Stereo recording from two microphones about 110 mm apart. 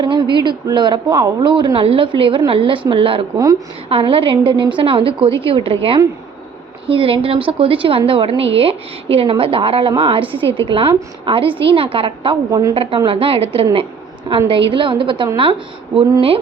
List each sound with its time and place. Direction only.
0.0 s a woman's voice: 45° right (ahead or behind)
3.3 s a woman's voice: 30° right (ahead or behind)
3.8 s a woman's voice: 55° right (ahead or behind)
12.5 s a woman's voice: 35° right (ahead or behind)
12.7 s a woman's voice: 60° right (ahead or behind)